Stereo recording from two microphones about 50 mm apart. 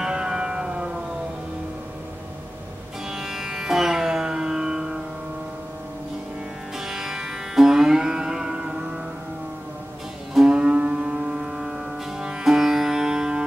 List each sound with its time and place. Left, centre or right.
0.0 s music: centre
3.1 s music: centre
6.9 s music: centre
10.4 s music: centre